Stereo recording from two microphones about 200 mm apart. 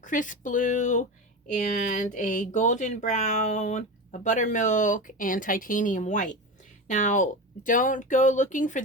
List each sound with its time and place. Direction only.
0.0 s speech: 40° left (ahead or behind)